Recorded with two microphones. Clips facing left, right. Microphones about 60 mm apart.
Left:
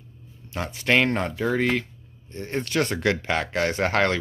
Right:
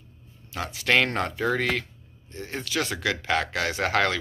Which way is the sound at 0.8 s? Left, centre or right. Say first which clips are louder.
Left 2 dB; centre.